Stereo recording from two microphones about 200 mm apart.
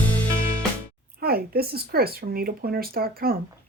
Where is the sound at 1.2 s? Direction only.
50° right (ahead or behind).